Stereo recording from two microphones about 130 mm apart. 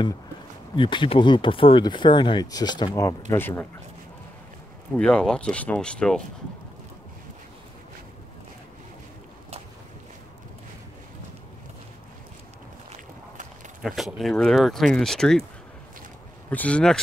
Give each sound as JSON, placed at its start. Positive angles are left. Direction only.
{"t": 0.7, "sound": "speech", "side_deg": 40}
{"t": 3.3, "sound": "speech", "side_deg": 15}
{"t": 4.9, "sound": "speech", "side_deg": 5}
{"t": 13.8, "sound": "speech", "side_deg": 0}
{"t": 16.4, "sound": "speech", "side_deg": 10}